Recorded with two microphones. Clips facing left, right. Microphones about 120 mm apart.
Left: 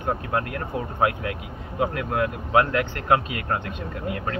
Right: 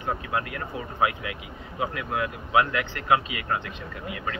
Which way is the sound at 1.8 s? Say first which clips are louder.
Left 4 dB; 45° left (ahead or behind).